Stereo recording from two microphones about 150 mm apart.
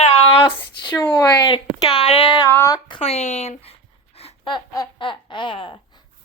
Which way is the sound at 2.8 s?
40° left (ahead or behind).